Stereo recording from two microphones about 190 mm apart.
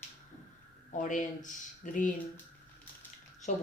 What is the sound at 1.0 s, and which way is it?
Speech, 40° left (ahead or behind).